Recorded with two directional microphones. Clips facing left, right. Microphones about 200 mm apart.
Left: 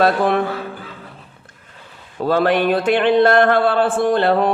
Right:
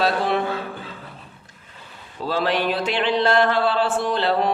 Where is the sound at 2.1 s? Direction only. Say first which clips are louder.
Left 6 dB; 55° left (ahead or behind).